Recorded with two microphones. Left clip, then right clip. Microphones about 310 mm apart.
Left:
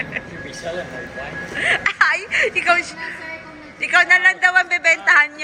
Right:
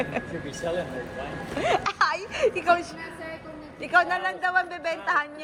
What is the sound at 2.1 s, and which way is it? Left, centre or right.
Speech, centre.